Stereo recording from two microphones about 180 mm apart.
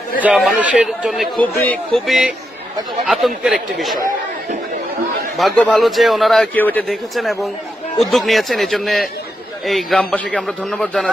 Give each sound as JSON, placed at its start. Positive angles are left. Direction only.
{"t": 0.2, "sound": "speech", "side_deg": 0}
{"t": 5.4, "sound": "speech", "side_deg": 5}